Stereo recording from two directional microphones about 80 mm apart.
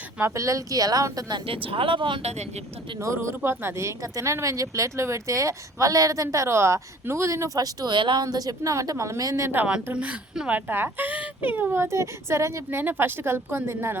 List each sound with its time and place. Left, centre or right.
0.2 s a woman's voice: right
1.9 s speech: right
3.0 s speech: right
7.9 s a woman's voice: right
8.2 s a woman's voice: right
9.9 s speech: centre; by 12.6 s right
12.7 s speech: right